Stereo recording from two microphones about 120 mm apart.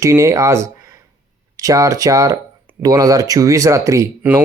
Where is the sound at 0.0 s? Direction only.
25° right (ahead or behind).